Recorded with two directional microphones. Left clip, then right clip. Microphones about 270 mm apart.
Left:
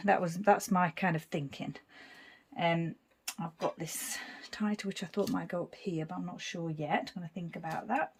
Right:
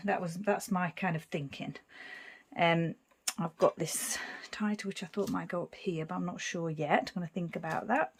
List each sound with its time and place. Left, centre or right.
0.0 s speech: centre
2.6 s speech: centre
4.5 s speech: centre; by 8.0 s right